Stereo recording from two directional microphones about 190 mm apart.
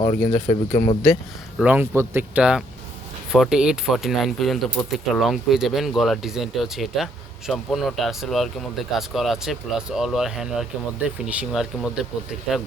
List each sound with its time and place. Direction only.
0.0 s speech: 30° left (ahead or behind)
1.5 s speech: 10° right (ahead or behind)